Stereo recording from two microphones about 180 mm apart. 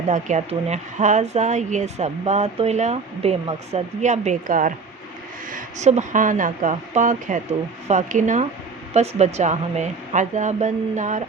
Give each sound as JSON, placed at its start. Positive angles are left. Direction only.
{"t": 0.1, "sound": "speech", "side_deg": -40}